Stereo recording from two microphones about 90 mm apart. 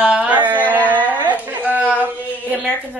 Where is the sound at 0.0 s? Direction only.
15° right (ahead or behind).